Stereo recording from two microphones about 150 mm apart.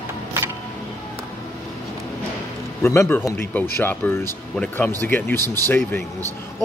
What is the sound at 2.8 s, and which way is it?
Speech, 20° left (ahead or behind).